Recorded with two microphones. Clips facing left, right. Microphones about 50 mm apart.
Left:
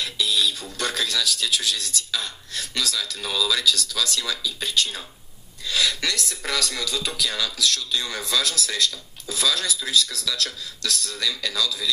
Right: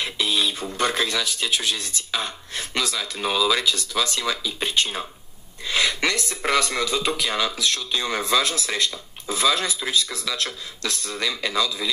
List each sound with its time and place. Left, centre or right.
0.0 s speech: right